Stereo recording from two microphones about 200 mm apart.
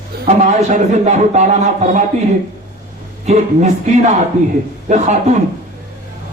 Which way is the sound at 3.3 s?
35° right (ahead or behind).